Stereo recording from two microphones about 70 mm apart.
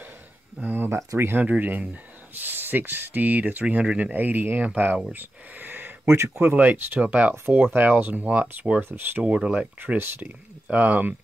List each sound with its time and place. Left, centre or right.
0.6 s speech: right
1.3 s speech: right
6.5 s speech: right
9.2 s speech: centre